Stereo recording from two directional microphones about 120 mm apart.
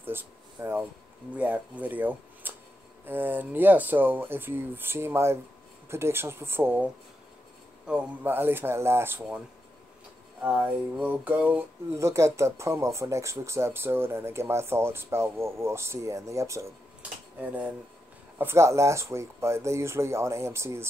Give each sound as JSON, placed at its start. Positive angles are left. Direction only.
{"t": 0.0, "sound": "speech", "side_deg": -15}
{"t": 10.4, "sound": "speech", "side_deg": -15}
{"t": 11.9, "sound": "speech", "side_deg": -25}
{"t": 18.4, "sound": "speech", "side_deg": -20}